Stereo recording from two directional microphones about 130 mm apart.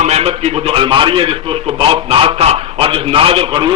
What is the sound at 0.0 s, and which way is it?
A man's voice, 55° right (ahead or behind).